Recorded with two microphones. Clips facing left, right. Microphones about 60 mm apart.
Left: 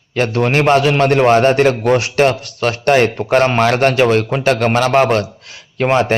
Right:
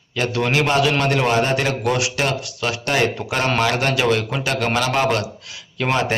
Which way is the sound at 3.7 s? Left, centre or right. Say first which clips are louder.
Left 7 dB; left.